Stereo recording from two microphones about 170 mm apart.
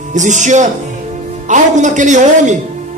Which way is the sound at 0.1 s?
45° right (ahead or behind).